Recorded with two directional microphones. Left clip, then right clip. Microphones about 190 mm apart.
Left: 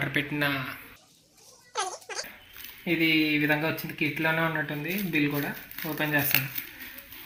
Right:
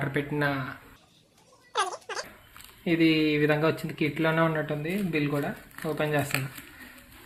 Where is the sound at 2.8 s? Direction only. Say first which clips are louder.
Right 1 dB; 60° right (ahead or behind).